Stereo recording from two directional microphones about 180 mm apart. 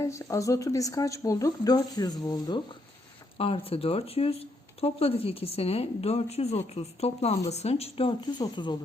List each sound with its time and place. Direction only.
0.0 s speech: 15° left (ahead or behind)
3.3 s speech: 30° left (ahead or behind)